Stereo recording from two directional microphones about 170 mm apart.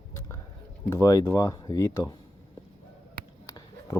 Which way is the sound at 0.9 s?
20° left (ahead or behind).